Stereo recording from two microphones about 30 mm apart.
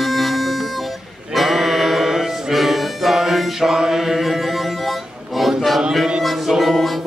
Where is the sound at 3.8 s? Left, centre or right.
Centre.